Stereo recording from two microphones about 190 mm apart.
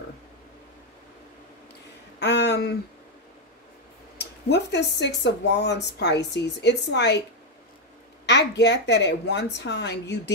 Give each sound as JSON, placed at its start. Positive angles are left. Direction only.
{"t": 2.1, "sound": "a sound", "side_deg": 60}
{"t": 4.2, "sound": "speech", "side_deg": 65}
{"t": 8.3, "sound": "speech", "side_deg": 65}